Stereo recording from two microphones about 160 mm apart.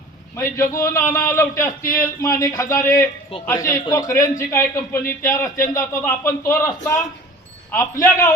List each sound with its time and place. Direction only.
0.5 s a man's voice: 20° left (ahead or behind)